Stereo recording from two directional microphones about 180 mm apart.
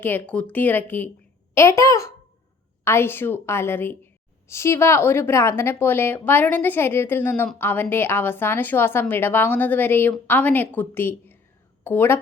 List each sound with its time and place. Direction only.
0.0 s a woman's voice: 10° left (ahead or behind)